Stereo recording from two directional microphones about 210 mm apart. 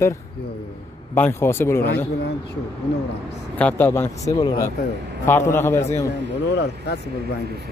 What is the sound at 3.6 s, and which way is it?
Speech, 10° left (ahead or behind).